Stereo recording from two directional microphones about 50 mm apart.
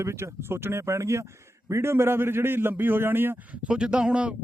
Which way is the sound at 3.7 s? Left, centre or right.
Centre.